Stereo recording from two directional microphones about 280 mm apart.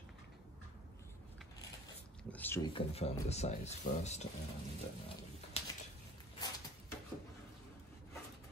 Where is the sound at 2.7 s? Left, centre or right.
Centre.